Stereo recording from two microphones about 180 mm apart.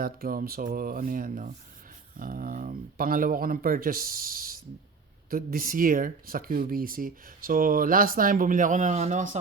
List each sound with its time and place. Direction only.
0.0 s speech: 55° right (ahead or behind)